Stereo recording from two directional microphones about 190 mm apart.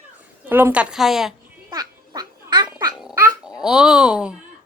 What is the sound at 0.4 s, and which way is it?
Speech, 10° right (ahead or behind).